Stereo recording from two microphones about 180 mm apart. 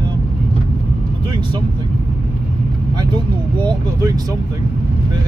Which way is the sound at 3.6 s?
20° right (ahead or behind).